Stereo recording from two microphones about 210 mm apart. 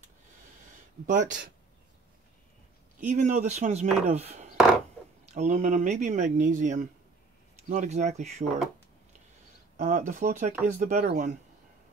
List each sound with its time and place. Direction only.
1.0 s speech: 35° right (ahead or behind)
3.0 s speech: 35° right (ahead or behind)
9.8 s speech: 35° right (ahead or behind)